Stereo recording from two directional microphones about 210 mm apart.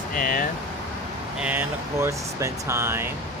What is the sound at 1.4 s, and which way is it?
Speech, 10° right (ahead or behind).